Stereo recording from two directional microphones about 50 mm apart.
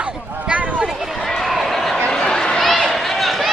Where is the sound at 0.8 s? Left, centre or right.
Centre.